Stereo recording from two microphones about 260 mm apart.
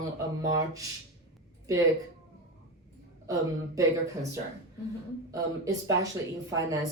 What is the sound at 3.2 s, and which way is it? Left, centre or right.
Speech, centre.